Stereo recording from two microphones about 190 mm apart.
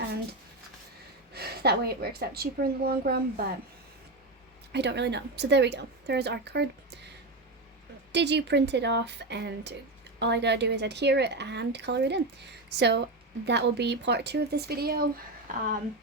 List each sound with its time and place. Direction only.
1.3 s a woman's voice: 55° right (ahead or behind)
4.7 s speech: 65° right (ahead or behind)
8.1 s speech: 65° right (ahead or behind); by 15.6 s 45° right (ahead or behind)